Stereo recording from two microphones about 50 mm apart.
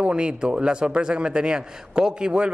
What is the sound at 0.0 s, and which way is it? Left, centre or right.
Speech, centre.